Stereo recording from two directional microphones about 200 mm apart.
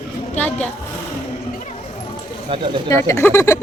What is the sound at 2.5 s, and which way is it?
Speech, 25° right (ahead or behind).